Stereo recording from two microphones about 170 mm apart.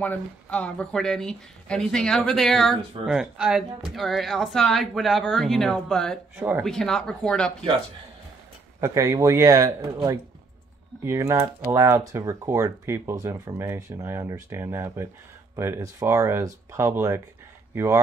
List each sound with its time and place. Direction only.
0.0 s speech: 10° left (ahead or behind)
8.8 s speech: 15° right (ahead or behind)
11.1 s speech: 20° right (ahead or behind)